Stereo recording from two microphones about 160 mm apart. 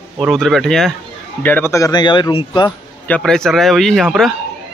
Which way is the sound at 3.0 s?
5° left (ahead or behind).